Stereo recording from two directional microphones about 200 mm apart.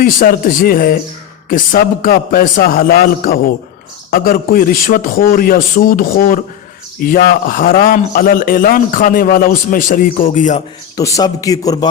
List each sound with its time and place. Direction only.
0.0 s a man's voice: 45° left (ahead or behind)
10.9 s a man's voice: 15° left (ahead or behind)